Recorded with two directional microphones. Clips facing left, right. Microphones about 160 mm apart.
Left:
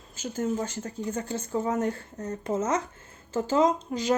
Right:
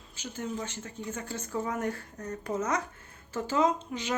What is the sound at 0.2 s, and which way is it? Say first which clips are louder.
Speech: left 7 dB; 45° left (ahead or behind).